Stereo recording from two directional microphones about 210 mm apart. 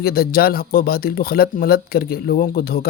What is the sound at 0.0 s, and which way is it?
Speech, 45° left (ahead or behind).